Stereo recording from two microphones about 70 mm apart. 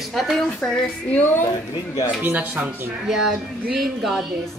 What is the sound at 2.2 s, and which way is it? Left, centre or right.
Speech, right.